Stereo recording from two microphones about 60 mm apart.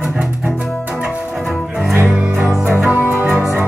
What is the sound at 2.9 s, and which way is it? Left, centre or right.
Music, right.